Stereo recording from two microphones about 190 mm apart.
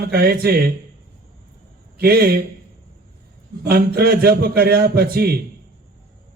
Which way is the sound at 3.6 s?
55° right (ahead or behind).